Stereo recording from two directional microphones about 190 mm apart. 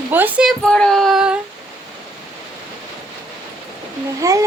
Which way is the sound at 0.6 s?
5° left (ahead or behind).